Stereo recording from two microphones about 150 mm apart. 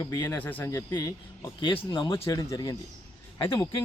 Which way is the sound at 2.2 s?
20° left (ahead or behind).